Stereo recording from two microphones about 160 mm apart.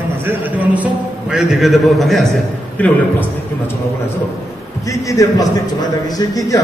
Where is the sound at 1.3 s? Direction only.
Centre (ahead or behind).